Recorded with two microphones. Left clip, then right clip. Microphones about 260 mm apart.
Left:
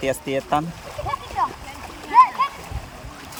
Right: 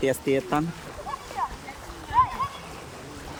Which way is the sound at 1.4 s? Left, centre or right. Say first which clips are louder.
Left 7 dB; left.